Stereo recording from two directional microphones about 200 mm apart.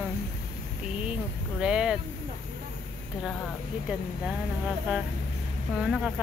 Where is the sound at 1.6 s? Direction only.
5° right (ahead or behind).